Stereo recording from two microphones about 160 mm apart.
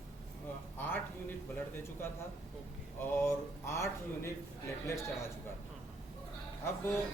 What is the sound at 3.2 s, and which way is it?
A woman's voice, 15° left (ahead or behind).